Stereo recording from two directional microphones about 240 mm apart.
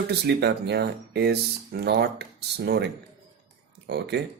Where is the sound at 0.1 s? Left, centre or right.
Right.